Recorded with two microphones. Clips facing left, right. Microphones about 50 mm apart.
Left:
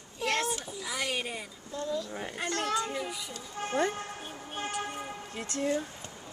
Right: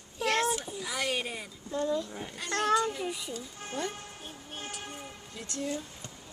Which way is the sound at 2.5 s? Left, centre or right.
Right.